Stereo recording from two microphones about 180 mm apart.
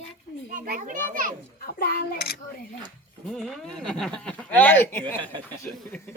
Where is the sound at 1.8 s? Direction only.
60° left (ahead or behind).